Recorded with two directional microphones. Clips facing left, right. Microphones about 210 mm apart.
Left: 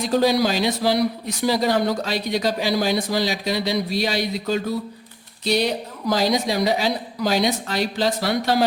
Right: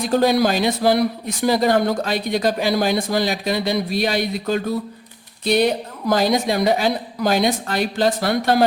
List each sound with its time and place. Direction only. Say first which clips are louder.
0.1 s a man's voice: right 2 dB; 55° right (ahead or behind)